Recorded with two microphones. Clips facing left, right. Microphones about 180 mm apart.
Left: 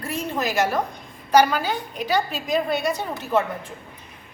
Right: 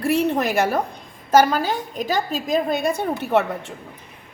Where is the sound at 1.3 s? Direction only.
40° right (ahead or behind).